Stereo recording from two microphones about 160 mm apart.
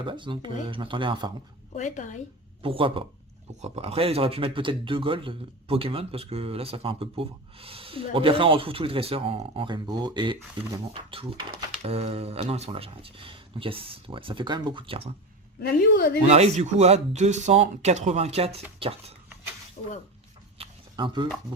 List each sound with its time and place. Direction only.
0.0 s speech: 30° right (ahead or behind)
1.7 s a woman's voice: 50° left (ahead or behind)
2.6 s speech: 35° right (ahead or behind)
15.6 s a woman's voice: 75° left (ahead or behind)
16.2 s speech: 45° right (ahead or behind)
19.8 s speech: 40° left (ahead or behind)
20.6 s a sound: 30° right (ahead or behind)